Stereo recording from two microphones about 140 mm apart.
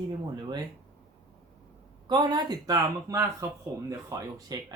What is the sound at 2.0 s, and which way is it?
Speech, 30° right (ahead or behind).